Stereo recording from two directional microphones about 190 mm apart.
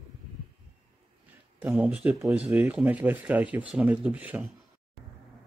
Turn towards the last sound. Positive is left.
turn(degrees=-10)  # may be behind; listen again after turning